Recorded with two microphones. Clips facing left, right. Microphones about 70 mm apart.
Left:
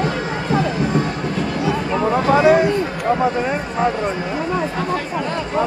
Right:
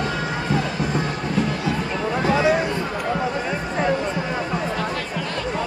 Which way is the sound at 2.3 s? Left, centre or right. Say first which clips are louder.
Left 6 dB; left.